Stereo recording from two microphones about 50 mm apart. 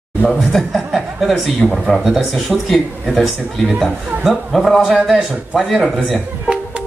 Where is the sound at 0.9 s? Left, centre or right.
Centre.